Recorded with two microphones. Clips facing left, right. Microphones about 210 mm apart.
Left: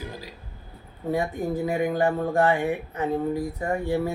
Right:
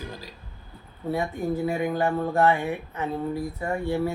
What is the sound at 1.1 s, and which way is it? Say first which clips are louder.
Speech: left 1 dB; 15° left (ahead or behind).